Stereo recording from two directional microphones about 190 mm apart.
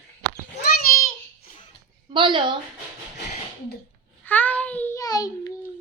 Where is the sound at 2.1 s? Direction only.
25° right (ahead or behind).